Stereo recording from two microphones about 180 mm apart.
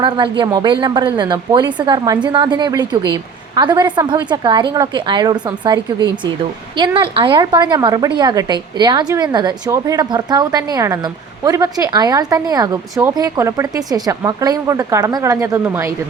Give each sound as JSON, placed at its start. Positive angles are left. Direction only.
{"t": 0.0, "sound": "a woman's voice", "side_deg": -25}